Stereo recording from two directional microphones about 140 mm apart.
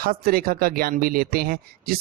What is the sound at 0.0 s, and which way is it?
Speech, 90° right.